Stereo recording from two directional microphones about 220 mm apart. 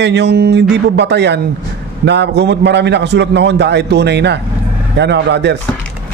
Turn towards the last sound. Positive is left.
turn(degrees=-50)  # may be behind; listen again after turning